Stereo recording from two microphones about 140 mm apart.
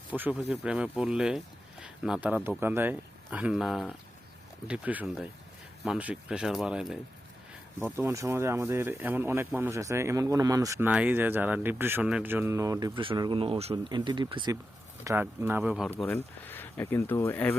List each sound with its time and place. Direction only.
0.1 s speech: 10° right (ahead or behind)
7.8 s speech: 15° right (ahead or behind)
10.8 s speech: 10° right (ahead or behind)
12.9 s speech: 40° right (ahead or behind)
13.9 s speech: 35° right (ahead or behind)
15.0 s speech: 15° right (ahead or behind)
16.1 s speech: 15° left (ahead or behind)